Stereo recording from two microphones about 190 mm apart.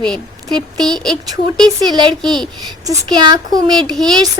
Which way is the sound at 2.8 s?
25° right (ahead or behind).